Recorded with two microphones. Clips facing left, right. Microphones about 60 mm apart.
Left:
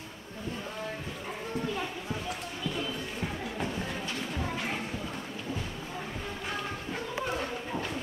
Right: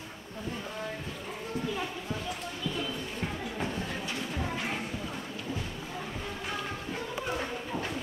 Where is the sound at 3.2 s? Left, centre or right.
Centre.